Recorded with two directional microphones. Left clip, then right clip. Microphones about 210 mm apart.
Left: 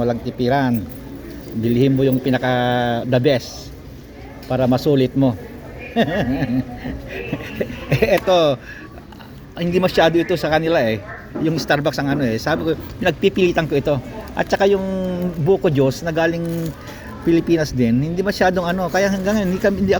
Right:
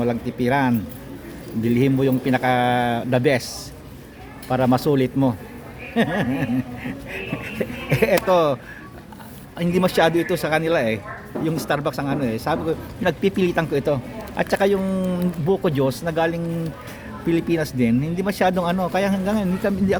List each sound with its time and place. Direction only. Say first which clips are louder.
0.0 s a man's voice: left 3 dB; 15° right (ahead or behind)
4.4 s a man's voice: left 2 dB; 15° right (ahead or behind)
5.9 s a sound: left 3 dB; 10° right (ahead or behind)
9.6 s a man's voice: left 3 dB; 5° right (ahead or behind)